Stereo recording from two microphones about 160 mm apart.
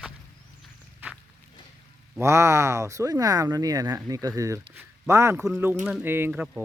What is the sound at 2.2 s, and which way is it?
Speech, 20° right (ahead or behind).